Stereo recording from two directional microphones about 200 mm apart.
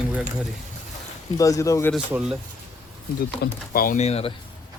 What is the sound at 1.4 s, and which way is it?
Speech, 15° left (ahead or behind).